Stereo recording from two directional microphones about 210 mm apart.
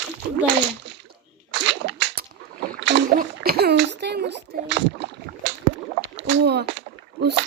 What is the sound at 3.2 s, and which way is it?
A child's voice, 45° right (ahead or behind).